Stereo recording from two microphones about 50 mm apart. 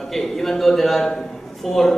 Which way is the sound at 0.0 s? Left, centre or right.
Centre.